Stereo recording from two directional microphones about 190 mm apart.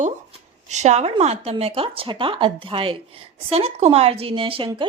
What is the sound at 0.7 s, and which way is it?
A woman's voice, 35° right (ahead or behind).